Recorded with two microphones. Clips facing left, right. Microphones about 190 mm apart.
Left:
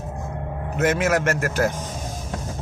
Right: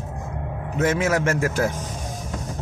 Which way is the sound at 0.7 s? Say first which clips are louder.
Left 1 dB; 5° left (ahead or behind).